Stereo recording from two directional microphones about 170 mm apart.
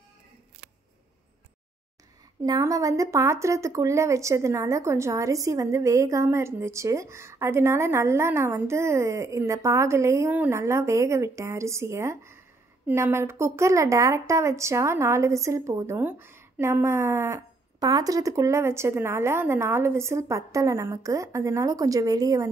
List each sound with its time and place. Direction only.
2.4 s speech: 20° right (ahead or behind)